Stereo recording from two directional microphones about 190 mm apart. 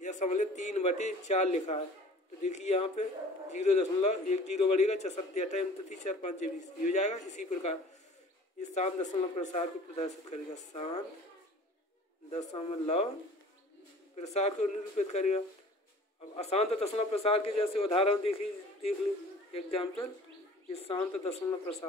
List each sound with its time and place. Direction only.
0.0 s a man's voice: 40° left (ahead or behind)
12.3 s a man's voice: 35° left (ahead or behind)
14.1 s a man's voice: 35° left (ahead or behind)